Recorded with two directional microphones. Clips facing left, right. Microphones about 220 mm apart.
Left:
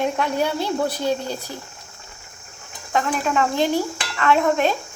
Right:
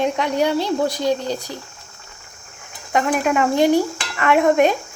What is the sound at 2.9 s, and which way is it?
Speech, 15° right (ahead or behind).